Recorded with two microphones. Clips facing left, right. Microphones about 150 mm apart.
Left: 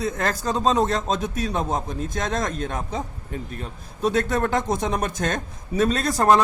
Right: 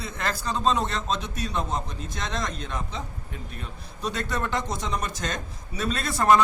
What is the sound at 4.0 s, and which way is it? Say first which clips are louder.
A man's voice: left 8 dB; 45° left (ahead or behind).